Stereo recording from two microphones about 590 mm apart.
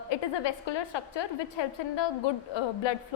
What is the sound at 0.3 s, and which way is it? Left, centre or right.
A woman's voice, left.